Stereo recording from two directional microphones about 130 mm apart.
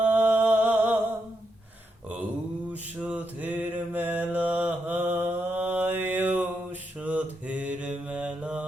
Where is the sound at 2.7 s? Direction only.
10° right (ahead or behind).